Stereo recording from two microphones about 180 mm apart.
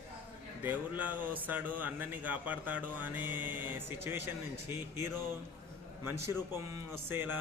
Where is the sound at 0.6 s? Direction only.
10° right (ahead or behind).